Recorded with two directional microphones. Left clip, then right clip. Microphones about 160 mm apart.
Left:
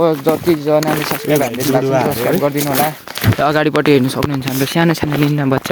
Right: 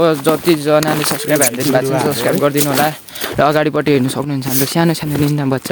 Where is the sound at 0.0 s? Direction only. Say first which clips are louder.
Right 1 dB; 10° right (ahead or behind).